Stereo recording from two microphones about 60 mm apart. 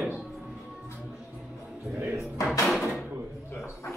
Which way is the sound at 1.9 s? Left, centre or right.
Right.